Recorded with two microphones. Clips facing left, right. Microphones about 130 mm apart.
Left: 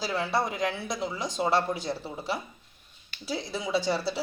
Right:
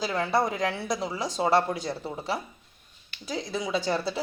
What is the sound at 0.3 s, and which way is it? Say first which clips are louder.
Speech: right 2 dB; centre (ahead or behind).